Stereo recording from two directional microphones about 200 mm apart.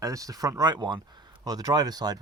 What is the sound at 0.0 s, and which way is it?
Speech, 15° right (ahead or behind).